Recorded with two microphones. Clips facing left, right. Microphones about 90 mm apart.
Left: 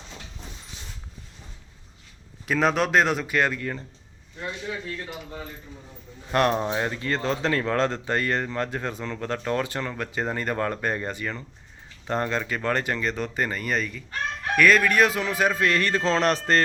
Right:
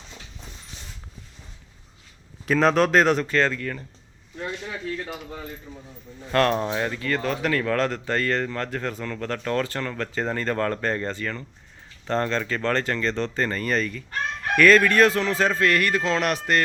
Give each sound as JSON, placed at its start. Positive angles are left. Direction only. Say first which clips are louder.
{"t": 2.5, "sound": "speech", "louder": "right 3 dB", "side_deg": 5}
{"t": 3.2, "sound": "speech", "louder": "right 1 dB", "side_deg": 15}
{"t": 6.3, "sound": "speech", "louder": "right 1 dB", "side_deg": 15}